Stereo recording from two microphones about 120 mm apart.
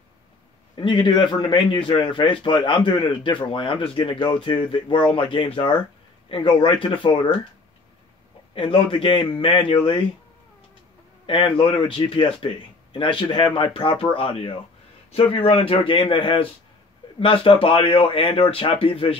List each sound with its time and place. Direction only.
0.7 s speech: 40° left (ahead or behind)
8.5 s speech: 45° left (ahead or behind)
11.2 s speech: 45° left (ahead or behind)